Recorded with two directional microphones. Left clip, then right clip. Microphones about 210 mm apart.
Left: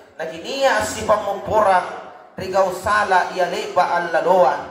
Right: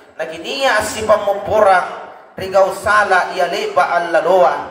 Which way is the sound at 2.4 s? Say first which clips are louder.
Right 5 dB; 35° right (ahead or behind).